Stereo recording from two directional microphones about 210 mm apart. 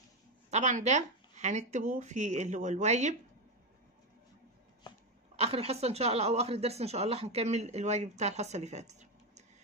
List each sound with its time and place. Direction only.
0.5 s speech: 35° right (ahead or behind)
5.3 s speech: 30° right (ahead or behind)